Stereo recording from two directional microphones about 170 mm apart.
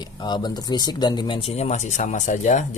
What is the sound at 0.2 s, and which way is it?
Speech, 25° left (ahead or behind).